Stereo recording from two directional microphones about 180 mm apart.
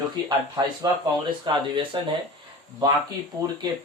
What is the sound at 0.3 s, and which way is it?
Speech, 20° right (ahead or behind).